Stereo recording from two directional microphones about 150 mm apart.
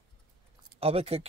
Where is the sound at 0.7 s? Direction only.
40° right (ahead or behind).